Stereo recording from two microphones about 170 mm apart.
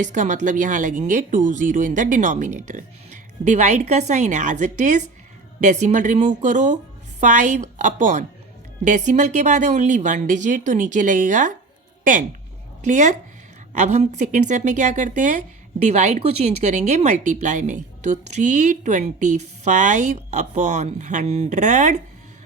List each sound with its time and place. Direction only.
0.0 s speech: 45° right (ahead or behind)
12.8 s speech: 45° right (ahead or behind)